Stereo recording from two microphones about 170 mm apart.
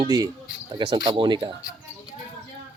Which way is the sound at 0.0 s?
20° right (ahead or behind).